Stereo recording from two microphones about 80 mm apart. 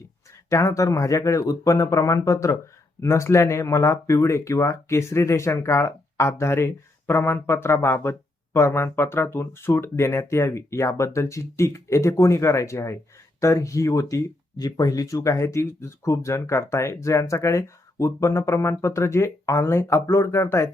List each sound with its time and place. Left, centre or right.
0.5 s speech: left